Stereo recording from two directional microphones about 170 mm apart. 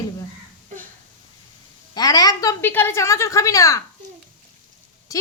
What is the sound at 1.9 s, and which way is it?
A woman's voice, 20° left (ahead or behind).